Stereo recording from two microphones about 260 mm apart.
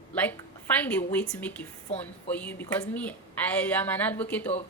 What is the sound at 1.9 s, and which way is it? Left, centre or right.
Speech, left.